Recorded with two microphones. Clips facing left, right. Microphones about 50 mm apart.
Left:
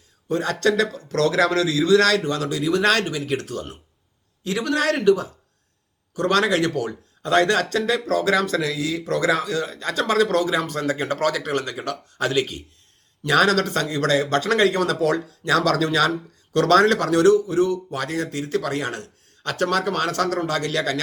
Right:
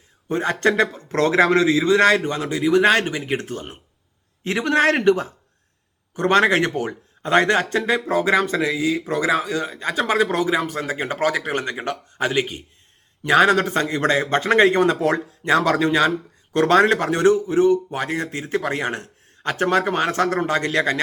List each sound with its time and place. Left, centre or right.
0.3 s a man's voice: right